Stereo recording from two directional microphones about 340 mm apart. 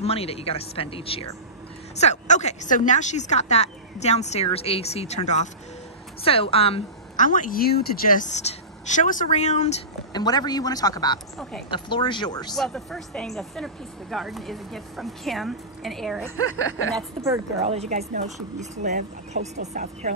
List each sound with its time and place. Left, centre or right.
0.0 s a woman's voice: centre
12.5 s a woman's voice: centre